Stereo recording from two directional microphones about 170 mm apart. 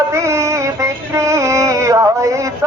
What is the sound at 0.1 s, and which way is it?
Music, 15° right (ahead or behind).